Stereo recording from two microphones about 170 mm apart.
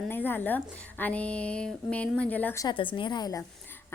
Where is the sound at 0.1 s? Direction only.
10° left (ahead or behind).